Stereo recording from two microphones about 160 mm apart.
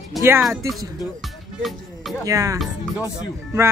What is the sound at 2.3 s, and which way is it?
Speech, 20° right (ahead or behind).